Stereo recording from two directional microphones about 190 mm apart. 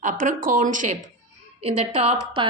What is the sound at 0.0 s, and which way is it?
A woman's voice, 40° right (ahead or behind).